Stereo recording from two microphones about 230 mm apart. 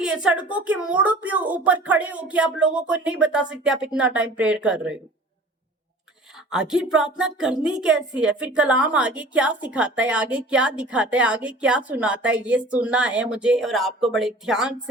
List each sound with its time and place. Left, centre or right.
0.0 s speech: centre
6.3 s speech: centre